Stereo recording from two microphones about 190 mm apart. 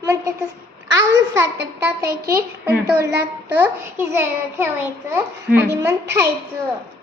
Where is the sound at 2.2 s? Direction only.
15° right (ahead or behind).